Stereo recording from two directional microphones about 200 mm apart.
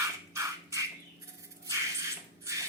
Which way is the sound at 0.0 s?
15° right (ahead or behind).